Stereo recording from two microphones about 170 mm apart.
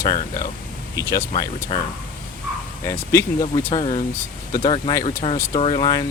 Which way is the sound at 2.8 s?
15° left (ahead or behind).